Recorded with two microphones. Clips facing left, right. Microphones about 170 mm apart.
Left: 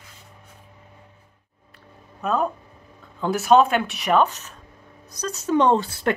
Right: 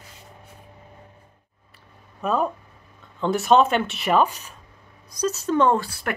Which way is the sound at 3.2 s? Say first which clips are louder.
Left 1 dB; centre (ahead or behind).